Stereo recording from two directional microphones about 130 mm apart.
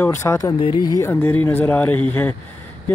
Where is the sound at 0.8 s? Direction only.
25° left (ahead or behind).